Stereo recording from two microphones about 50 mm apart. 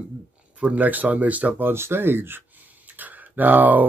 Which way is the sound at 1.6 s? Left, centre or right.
Right.